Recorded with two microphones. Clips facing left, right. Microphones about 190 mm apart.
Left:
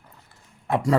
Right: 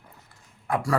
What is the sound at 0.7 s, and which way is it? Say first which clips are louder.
Dog: left 3 dB; 25° left (ahead or behind).